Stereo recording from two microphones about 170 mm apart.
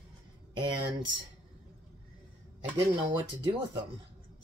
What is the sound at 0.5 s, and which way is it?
Speech, 25° right (ahead or behind).